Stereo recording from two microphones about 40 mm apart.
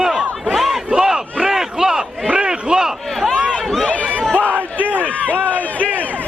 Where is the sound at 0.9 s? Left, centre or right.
Centre.